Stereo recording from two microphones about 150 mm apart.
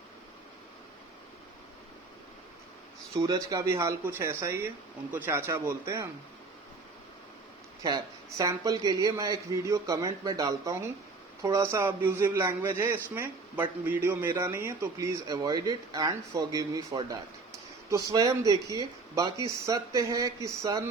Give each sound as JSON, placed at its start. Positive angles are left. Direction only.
{"t": 3.2, "sound": "a man's voice", "side_deg": -25}
{"t": 7.8, "sound": "a man's voice", "side_deg": -25}